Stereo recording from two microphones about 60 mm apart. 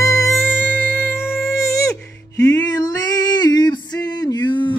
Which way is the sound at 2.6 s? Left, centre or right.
Left.